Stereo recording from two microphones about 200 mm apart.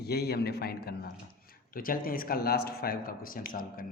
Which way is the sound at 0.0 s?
50° left (ahead or behind).